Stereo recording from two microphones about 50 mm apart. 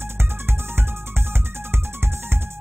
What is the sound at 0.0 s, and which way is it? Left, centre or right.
Music, right.